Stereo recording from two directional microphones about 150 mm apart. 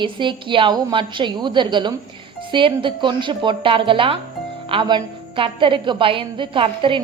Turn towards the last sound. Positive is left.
turn(degrees=-35)  # may be behind; listen again after turning